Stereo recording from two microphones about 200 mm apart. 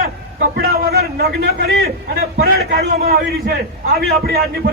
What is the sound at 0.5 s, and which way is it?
A man's voice, 50° right (ahead or behind).